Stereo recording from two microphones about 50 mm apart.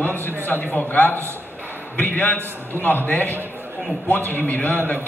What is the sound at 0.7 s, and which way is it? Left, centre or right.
A man's voice, left.